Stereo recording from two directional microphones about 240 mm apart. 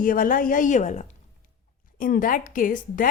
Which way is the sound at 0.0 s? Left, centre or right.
Left.